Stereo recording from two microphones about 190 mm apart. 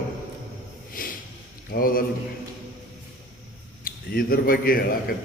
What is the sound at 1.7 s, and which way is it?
Speech, 50° left (ahead or behind).